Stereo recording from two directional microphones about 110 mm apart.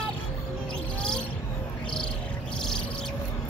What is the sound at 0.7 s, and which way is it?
Bird, 10° left (ahead or behind).